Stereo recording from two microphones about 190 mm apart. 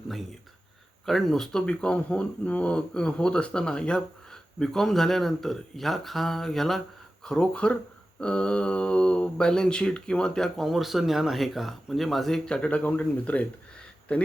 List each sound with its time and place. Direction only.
0.1 s speech: centre (ahead or behind)